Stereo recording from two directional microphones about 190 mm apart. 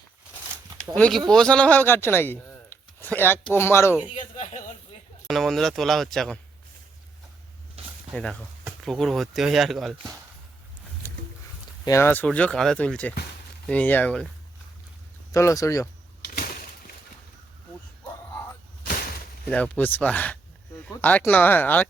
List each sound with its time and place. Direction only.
0.9 s speech: 5° left (ahead or behind)
4.1 s a sound: 35° left (ahead or behind)
5.3 s speech: centre (ahead or behind)
8.1 s speech: centre (ahead or behind)
11.9 s speech: 10° left (ahead or behind)
15.3 s speech: 15° left (ahead or behind)
19.5 s speech: 5° left (ahead or behind)